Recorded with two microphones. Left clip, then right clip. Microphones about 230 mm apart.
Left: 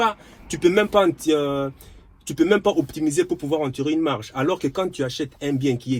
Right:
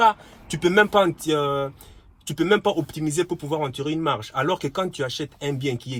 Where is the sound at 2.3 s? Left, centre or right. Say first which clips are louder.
Left 2 dB; centre.